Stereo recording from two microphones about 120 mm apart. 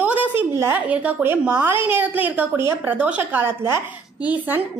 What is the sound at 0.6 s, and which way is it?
A woman's voice, 15° right (ahead or behind).